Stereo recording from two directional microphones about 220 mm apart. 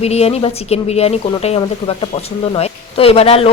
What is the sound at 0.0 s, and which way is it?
Speech, 30° left (ahead or behind).